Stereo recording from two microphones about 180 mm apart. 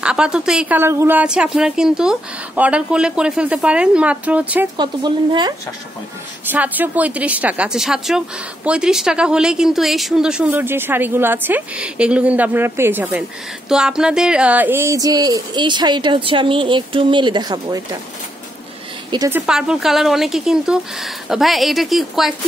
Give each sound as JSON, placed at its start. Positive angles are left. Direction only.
{"t": 0.0, "sound": "a woman's voice", "side_deg": -5}
{"t": 4.7, "sound": "speech", "side_deg": -25}
{"t": 6.5, "sound": "speech", "side_deg": -10}
{"t": 19.0, "sound": "a woman's voice", "side_deg": -20}
{"t": 19.3, "sound": "a woman's voice", "side_deg": -5}